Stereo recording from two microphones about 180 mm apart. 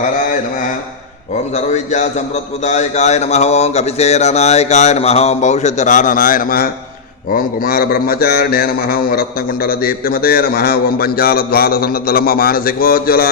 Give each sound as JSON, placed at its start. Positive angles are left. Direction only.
{"t": 1.5, "sound": "mantra", "side_deg": 40}
{"t": 7.3, "sound": "a man's voice", "side_deg": 55}